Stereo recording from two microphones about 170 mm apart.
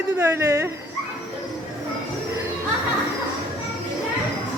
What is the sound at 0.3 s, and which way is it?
Speech, 15° right (ahead or behind).